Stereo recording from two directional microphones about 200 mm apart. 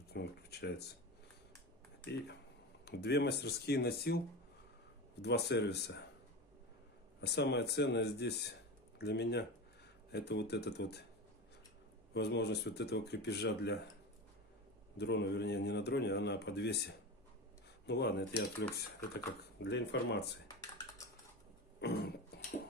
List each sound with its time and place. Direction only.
0.1 s speech: 55° left (ahead or behind)
2.8 s speech: 55° left (ahead or behind)
5.2 s speech: 55° left (ahead or behind)
7.2 s speech: 55° left (ahead or behind)
12.1 s speech: 55° left (ahead or behind)
15.0 s speech: 55° left (ahead or behind)
21.7 s cough: 55° left (ahead or behind)